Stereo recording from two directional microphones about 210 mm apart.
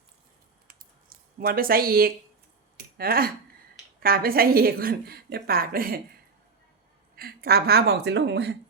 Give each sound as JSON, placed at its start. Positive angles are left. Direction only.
{"t": 0.7, "sound": "a sound", "side_deg": -45}
{"t": 3.0, "sound": "a woman's voice", "side_deg": -45}
{"t": 7.2, "sound": "a woman's voice", "side_deg": -45}